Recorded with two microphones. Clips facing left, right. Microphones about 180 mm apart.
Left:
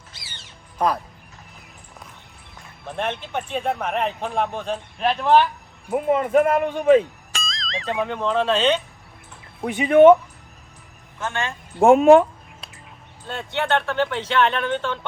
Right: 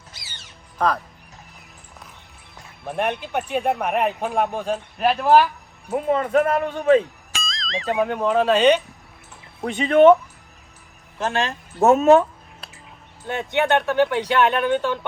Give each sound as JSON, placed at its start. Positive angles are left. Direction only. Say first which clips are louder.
{"t": 2.9, "sound": "a man's voice", "louder": "right 3 dB", "side_deg": -15}
{"t": 6.1, "sound": "speech", "louder": "left 1 dB", "side_deg": 10}
{"t": 7.3, "sound": "speech", "louder": "right 2 dB", "side_deg": 0}
{"t": 9.6, "sound": "speech", "louder": "left 1 dB", "side_deg": 10}
{"t": 11.2, "sound": "speech", "louder": "right 4 dB", "side_deg": -35}
{"t": 11.8, "sound": "speech", "louder": "left 2 dB", "side_deg": 15}
{"t": 13.2, "sound": "speech", "louder": "right 4 dB", "side_deg": -15}